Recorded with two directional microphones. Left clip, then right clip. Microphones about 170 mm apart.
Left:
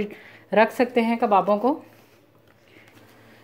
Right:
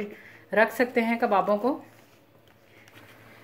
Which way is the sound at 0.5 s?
35° left (ahead or behind).